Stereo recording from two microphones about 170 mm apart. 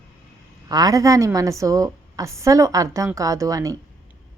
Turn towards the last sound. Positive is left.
turn(degrees=-20)  # may be behind; listen again after turning